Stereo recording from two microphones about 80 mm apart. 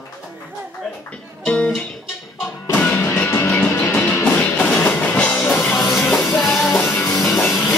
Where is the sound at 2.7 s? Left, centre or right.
Centre.